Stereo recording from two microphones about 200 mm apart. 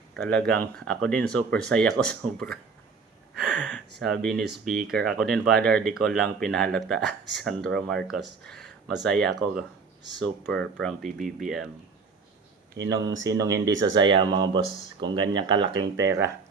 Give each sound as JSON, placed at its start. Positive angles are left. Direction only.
{"t": 0.1, "sound": "speech", "side_deg": 5}
{"t": 3.3, "sound": "a sound", "side_deg": 0}
{"t": 4.9, "sound": "speech", "side_deg": 5}
{"t": 8.4, "sound": "a sound", "side_deg": 0}
{"t": 9.0, "sound": "speech", "side_deg": 5}
{"t": 12.9, "sound": "speech", "side_deg": -15}